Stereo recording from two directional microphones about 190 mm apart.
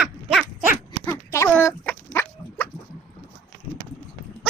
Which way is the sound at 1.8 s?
10° left (ahead or behind).